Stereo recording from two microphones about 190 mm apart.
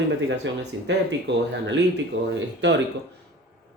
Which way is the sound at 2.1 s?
80° right.